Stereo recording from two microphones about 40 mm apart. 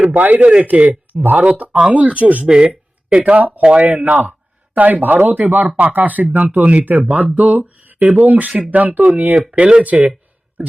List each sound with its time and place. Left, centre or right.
0.1 s speech: right
3.8 s speech: right
8.4 s speech: right